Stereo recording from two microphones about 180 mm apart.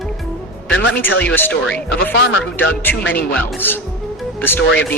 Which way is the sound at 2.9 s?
10° left (ahead or behind).